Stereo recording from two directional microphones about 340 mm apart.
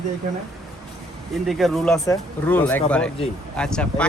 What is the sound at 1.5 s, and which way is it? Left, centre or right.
Speech, centre.